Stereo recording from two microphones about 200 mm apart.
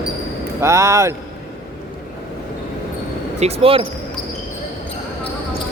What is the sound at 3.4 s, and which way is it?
Speech, 30° right (ahead or behind).